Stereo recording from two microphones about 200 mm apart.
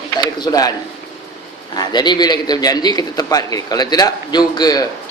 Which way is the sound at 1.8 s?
20° left (ahead or behind).